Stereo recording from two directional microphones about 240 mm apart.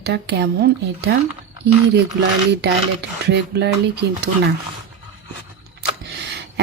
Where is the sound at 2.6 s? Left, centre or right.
Right.